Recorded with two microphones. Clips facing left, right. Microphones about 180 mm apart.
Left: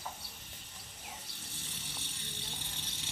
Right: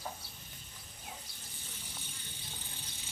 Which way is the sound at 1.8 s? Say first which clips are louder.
Left 3 dB; 75° left (ahead or behind).